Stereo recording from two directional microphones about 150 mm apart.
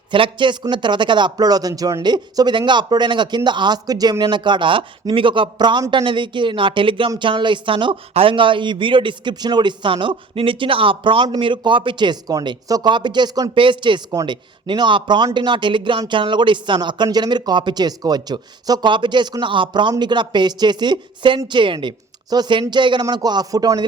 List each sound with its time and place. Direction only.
0.1 s speech: 35° right (ahead or behind)